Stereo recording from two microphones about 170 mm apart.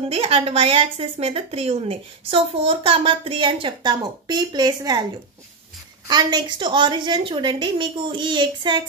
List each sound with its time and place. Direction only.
0.1 s speech: 35° right (ahead or behind)
6.0 s a woman's voice: 25° right (ahead or behind)